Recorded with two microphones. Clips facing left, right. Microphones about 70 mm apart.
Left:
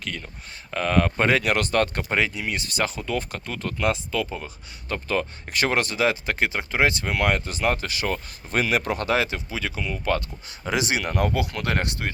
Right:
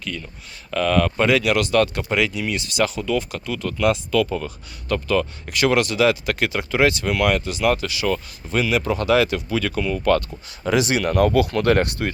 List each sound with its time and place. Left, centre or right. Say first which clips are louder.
0.0 s speech: right 3 dB; left
0.7 s speech: right 3 dB; left
5.0 s speech: right 3 dB; left
9.0 s speech: right 6 dB; left
11.5 s speech: right 8 dB; centre